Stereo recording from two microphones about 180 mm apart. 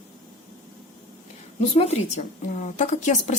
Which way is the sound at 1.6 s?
35° left (ahead or behind).